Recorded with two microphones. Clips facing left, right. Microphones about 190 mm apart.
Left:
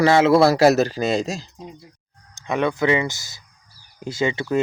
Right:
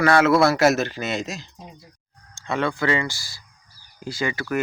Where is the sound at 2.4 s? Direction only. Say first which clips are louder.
Left 3 dB; 15° left (ahead or behind).